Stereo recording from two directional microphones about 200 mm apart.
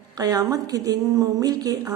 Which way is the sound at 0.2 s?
20° right (ahead or behind).